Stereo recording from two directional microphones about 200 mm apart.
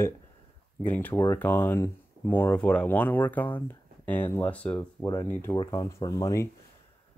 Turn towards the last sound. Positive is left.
turn(degrees=15)  # may be behind; listen again after turning